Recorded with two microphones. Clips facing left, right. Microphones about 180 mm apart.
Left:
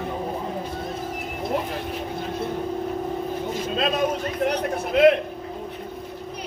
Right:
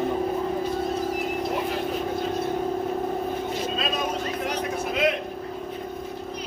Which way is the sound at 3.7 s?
55° left (ahead or behind).